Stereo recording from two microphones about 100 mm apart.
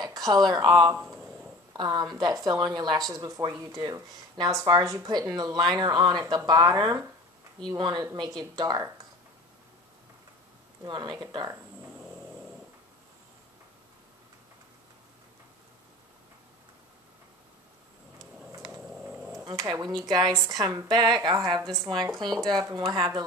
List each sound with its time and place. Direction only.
0.0 s a woman's voice: 40° right (ahead or behind)
10.9 s speech: 45° right (ahead or behind)
19.0 s a sound: 15° right (ahead or behind)
19.4 s a woman's voice: 45° right (ahead or behind)
21.9 s speech: 60° right (ahead or behind)
22.2 s a woman's voice: 45° right (ahead or behind)